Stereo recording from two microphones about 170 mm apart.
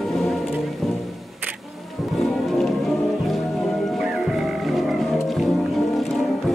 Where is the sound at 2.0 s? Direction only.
Centre (ahead or behind).